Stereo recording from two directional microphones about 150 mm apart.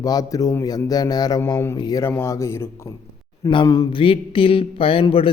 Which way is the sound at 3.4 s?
30° left (ahead or behind).